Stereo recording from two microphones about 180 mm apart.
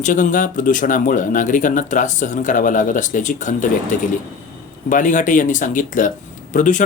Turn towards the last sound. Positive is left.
turn(degrees=45)  # may be behind; listen again after turning